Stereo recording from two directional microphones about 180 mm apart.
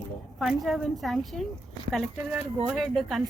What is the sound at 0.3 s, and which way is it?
A woman's voice, centre (ahead or behind).